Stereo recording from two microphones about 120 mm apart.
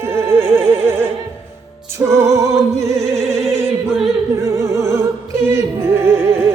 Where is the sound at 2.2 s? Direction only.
25° right (ahead or behind).